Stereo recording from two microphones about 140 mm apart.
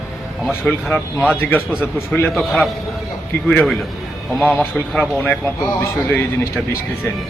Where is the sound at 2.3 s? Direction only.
Centre (ahead or behind).